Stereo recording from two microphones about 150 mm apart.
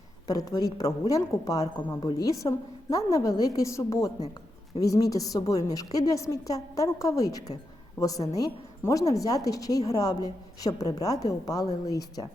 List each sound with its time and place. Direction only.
0.3 s a woman's voice: 25° left (ahead or behind)